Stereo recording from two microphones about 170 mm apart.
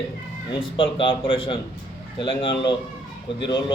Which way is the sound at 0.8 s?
30° left (ahead or behind).